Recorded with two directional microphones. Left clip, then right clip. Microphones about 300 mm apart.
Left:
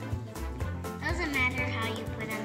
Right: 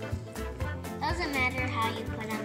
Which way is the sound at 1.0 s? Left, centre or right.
Centre.